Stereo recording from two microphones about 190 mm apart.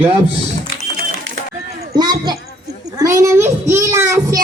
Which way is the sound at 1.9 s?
20° right (ahead or behind).